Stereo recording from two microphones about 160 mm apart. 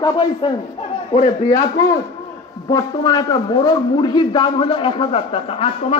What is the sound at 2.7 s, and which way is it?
A man's voice, 25° left (ahead or behind).